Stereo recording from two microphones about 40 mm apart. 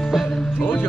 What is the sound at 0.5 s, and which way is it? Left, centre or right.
Music, left.